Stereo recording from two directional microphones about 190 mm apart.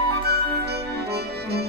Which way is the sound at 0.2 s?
55° right (ahead or behind).